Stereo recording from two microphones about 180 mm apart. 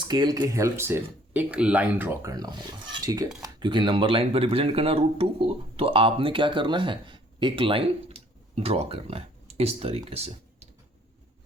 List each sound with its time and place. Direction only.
0.0 s speech: 25° right (ahead or behind)
2.3 s speech: 25° right (ahead or behind)